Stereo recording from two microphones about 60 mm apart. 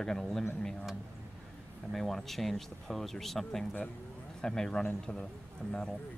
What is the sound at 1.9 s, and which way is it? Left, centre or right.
Speech, centre.